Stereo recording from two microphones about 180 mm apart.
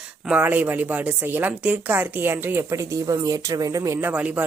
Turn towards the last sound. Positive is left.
turn(degrees=-10)  # may be behind; listen again after turning